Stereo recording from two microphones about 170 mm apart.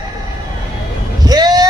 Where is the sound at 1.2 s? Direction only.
25° right (ahead or behind).